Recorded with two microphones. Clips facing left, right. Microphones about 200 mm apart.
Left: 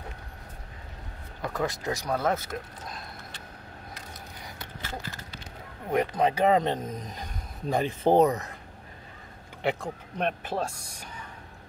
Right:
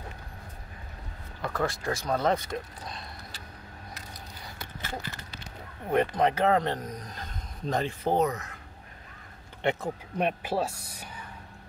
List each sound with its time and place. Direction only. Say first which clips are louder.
1.4 s speech: even; 15° left (ahead or behind)
2.1 s speech: right 2 dB; 5° left (ahead or behind)
5.9 s speech: even; 10° left (ahead or behind)
8.0 s speech: left 7 dB; 30° left (ahead or behind)
9.6 s speech: even; centre (ahead or behind)
10.1 s speech: right 1 dB; 10° right (ahead or behind)